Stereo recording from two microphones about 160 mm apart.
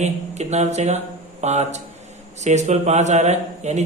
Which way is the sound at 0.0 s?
45° right (ahead or behind).